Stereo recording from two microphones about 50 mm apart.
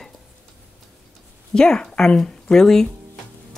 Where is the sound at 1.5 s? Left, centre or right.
Centre.